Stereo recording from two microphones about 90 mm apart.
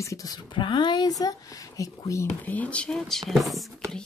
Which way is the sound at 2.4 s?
20° left (ahead or behind).